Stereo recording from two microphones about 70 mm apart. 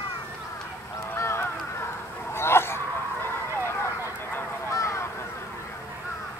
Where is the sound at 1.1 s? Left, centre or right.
Left.